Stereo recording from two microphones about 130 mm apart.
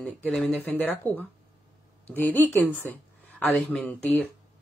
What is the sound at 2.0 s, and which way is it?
Speech, 15° left (ahead or behind).